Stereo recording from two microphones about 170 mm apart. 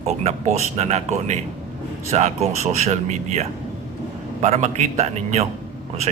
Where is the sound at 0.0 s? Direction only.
40° right (ahead or behind).